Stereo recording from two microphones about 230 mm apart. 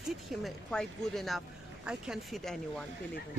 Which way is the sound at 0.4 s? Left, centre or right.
Centre.